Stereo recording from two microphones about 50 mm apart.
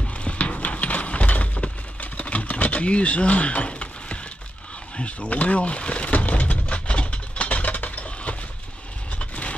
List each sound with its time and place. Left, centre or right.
0.1 s clip-clop: left
4.9 s speech: left
6.7 s a sound: left
9.2 s vehicle: left